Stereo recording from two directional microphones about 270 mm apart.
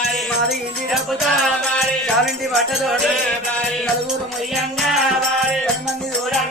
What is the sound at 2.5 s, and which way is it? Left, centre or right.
Music, centre.